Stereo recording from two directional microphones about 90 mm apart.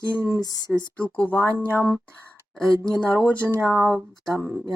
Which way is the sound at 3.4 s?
35° right (ahead or behind).